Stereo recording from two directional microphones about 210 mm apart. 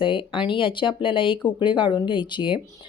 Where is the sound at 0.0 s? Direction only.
25° left (ahead or behind).